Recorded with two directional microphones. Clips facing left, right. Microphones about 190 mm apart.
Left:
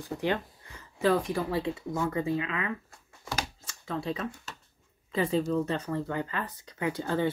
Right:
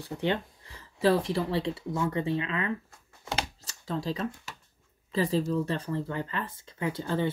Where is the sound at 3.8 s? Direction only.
35° right (ahead or behind).